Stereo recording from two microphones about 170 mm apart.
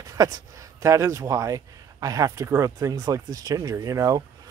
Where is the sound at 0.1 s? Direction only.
20° right (ahead or behind).